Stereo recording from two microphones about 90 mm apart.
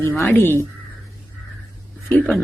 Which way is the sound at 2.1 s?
20° left (ahead or behind).